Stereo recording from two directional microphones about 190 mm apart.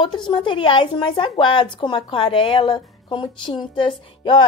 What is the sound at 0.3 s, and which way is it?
A woman's voice, 25° left (ahead or behind).